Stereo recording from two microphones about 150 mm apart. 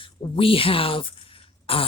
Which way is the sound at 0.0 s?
35° left (ahead or behind).